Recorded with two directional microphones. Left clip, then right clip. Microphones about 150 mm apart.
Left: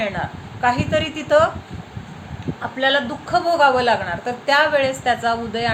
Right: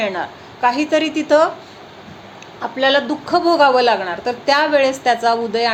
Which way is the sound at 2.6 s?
35° right (ahead or behind).